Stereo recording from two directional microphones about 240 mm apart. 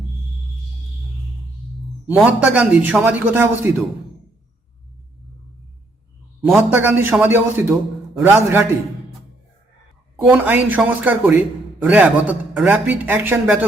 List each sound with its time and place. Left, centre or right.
2.0 s a man's voice: centre
6.4 s a man's voice: centre
10.2 s a man's voice: centre